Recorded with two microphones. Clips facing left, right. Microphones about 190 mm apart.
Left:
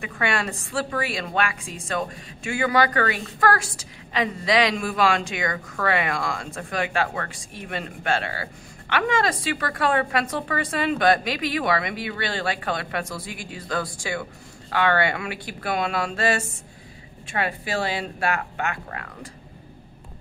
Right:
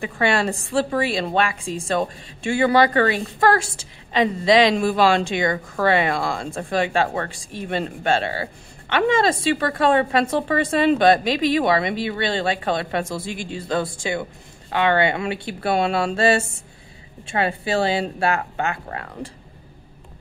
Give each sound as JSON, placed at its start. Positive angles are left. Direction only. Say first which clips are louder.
{"t": 0.0, "sound": "a woman's voice", "louder": "right 5 dB", "side_deg": -30}